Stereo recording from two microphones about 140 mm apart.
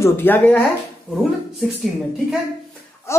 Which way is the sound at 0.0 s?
15° left (ahead or behind).